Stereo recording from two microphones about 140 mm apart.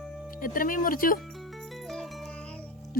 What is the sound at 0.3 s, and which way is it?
Speech, 85° left.